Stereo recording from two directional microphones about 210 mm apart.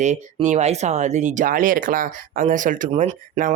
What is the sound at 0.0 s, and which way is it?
Speech, 35° right (ahead or behind).